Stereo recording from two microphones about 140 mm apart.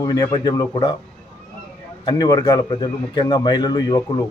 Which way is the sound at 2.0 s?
30° left (ahead or behind).